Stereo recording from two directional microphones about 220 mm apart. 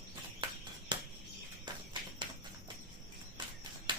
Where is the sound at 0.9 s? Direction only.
20° right (ahead or behind).